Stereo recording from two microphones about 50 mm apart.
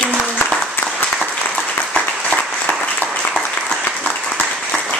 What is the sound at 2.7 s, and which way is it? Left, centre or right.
Applause, left.